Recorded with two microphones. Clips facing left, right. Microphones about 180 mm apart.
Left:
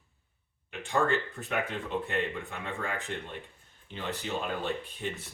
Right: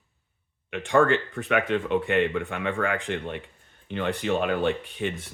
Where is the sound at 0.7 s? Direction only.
85° right.